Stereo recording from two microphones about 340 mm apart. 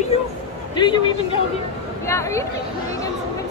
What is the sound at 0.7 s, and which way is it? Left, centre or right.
Speech, centre.